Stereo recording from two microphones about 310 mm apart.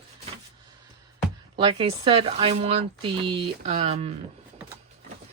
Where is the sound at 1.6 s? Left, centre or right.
Centre.